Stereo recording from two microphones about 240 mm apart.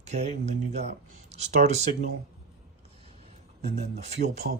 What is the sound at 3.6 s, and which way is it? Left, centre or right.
Speech, right.